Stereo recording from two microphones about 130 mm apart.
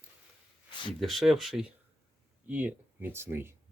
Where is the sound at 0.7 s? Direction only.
35° left (ahead or behind).